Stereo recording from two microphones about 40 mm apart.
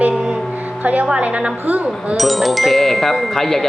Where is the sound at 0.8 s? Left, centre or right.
Right.